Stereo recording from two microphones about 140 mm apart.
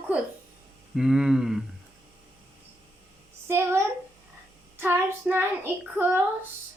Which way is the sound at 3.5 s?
20° right (ahead or behind).